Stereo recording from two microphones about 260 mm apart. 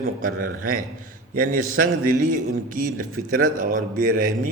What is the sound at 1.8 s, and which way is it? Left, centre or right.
A man's voice, right.